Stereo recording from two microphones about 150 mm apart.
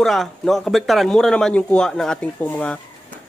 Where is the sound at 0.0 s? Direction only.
Centre (ahead or behind).